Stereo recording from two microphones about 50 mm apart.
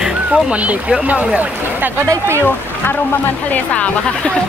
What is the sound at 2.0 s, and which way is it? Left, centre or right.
Speech, right.